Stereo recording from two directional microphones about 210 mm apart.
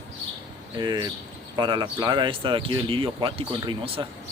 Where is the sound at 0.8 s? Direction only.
20° right (ahead or behind).